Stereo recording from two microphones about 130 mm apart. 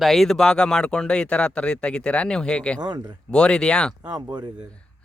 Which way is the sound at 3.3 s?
5° left (ahead or behind).